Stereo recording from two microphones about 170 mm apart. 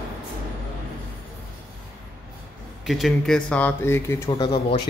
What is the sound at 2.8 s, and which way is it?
Speech, centre (ahead or behind).